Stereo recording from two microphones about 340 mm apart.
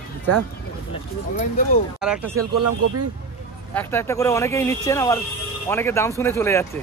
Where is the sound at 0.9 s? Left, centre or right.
Centre.